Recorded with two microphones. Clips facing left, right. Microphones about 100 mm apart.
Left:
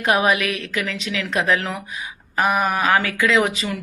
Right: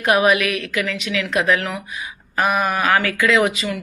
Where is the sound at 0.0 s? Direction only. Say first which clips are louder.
Right 2 dB; 25° left (ahead or behind).